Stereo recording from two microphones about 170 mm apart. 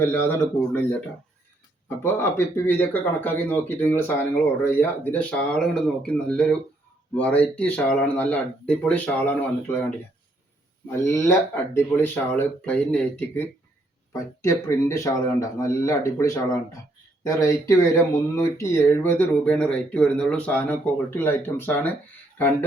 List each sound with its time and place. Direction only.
0.0 s speech: 10° left (ahead or behind)
2.1 s speech: 15° left (ahead or behind)
10.8 s speech: 15° left (ahead or behind)